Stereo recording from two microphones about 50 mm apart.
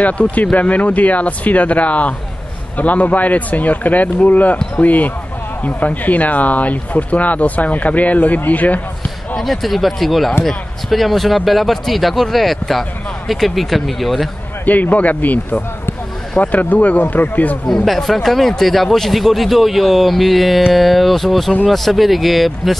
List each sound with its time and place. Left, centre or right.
0.0 s speech: left
9.4 s speech: centre
14.7 s speech: left
17.8 s speech: centre